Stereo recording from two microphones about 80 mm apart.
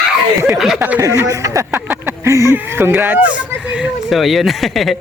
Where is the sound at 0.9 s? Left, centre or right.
Right.